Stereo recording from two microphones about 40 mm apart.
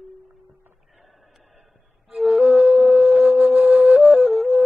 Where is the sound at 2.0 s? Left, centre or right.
Centre.